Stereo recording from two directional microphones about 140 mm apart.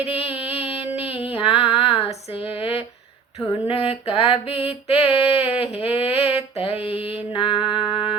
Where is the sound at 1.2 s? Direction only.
40° left (ahead or behind).